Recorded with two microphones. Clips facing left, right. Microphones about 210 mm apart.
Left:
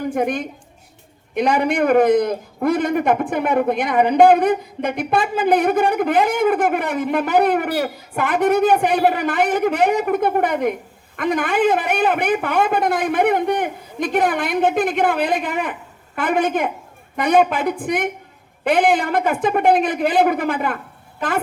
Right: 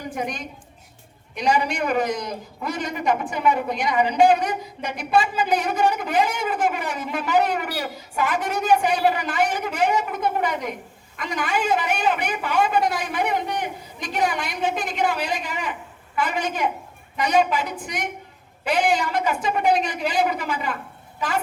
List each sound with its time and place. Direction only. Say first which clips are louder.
0.0 s a woman's voice: left 8 dB; 55° left (ahead or behind)